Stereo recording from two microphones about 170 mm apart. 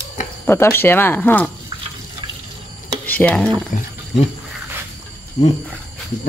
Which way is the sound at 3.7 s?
50° left (ahead or behind).